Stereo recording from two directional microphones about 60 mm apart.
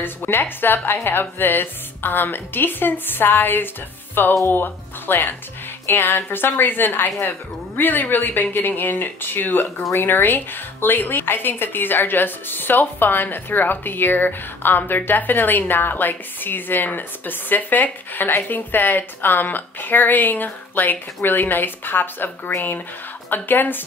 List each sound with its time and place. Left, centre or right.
0.0 s a woman's voice: left
23.3 s a woman's voice: left